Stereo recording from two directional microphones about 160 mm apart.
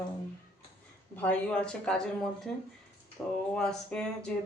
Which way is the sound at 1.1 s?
10° left (ahead or behind).